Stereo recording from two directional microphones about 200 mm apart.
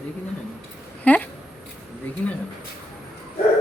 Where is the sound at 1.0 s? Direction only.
5° left (ahead or behind).